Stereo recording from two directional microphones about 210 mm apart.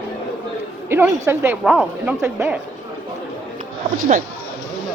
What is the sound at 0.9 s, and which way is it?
Speech, 10° right (ahead or behind).